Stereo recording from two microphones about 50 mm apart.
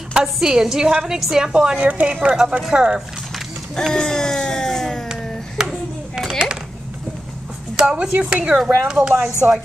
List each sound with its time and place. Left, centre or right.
0.1 s a woman's voice: centre
1.8 s a woman's voice: right
2.3 s a woman's voice: centre
3.7 s a sound: centre
5.6 s a sound: centre
7.8 s a woman's voice: right